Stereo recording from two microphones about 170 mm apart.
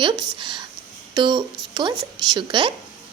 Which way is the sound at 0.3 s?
25° right (ahead or behind).